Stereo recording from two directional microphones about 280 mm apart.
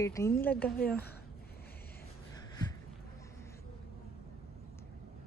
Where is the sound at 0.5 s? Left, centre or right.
Left.